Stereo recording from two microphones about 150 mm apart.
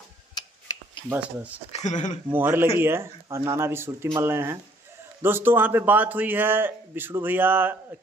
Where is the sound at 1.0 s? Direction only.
10° right (ahead or behind).